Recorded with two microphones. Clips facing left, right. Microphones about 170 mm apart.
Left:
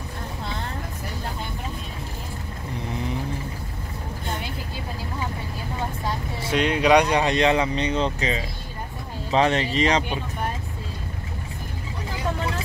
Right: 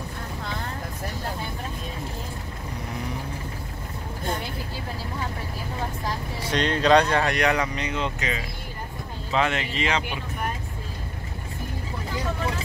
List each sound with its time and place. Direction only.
6.5 s speech: 10° left (ahead or behind); by 10.1 s 35° left (ahead or behind)